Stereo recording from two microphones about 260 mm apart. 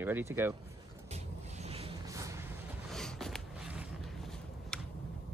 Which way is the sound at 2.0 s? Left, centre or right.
Centre.